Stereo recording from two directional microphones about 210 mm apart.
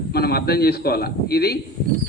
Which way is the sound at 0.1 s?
50° left (ahead or behind).